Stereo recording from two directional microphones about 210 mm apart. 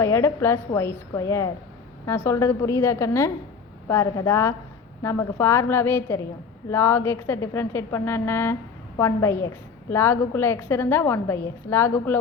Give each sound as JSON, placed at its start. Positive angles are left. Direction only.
{"t": 0.0, "sound": "a woman's voice", "side_deg": 15}